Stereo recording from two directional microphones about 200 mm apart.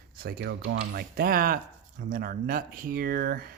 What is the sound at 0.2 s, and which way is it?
Speech, 55° right (ahead or behind).